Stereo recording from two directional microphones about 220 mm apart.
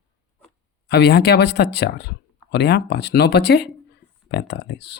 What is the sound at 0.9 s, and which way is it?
Speech, 50° left (ahead or behind).